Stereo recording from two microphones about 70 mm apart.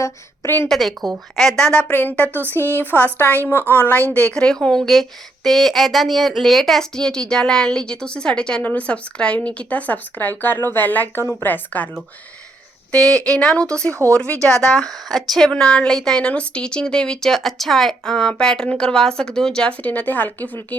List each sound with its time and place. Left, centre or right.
0.0 s a woman's voice: left
0.7 s a woman's voice: centre
1.9 s speech: left
4.1 s a woman's voice: centre
13.3 s a woman's voice: centre